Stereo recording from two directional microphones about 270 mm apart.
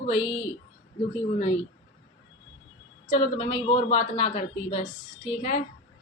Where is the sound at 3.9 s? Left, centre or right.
Left.